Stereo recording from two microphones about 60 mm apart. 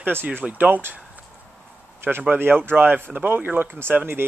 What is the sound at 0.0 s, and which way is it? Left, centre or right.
Speech, right.